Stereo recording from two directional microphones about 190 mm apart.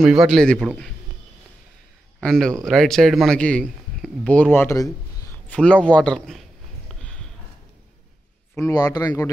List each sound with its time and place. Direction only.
0.0 s a man's voice: 5° right (ahead or behind)
2.1 s a man's voice: centre (ahead or behind)
5.5 s a man's voice: 5° left (ahead or behind)
6.9 s a sound: 5° left (ahead or behind)
8.5 s speech: 20° left (ahead or behind)